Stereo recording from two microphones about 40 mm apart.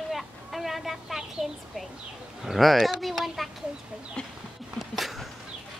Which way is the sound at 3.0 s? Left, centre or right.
Centre.